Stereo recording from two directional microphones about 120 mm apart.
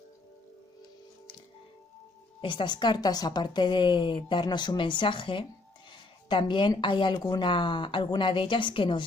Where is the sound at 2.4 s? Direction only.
40° left (ahead or behind).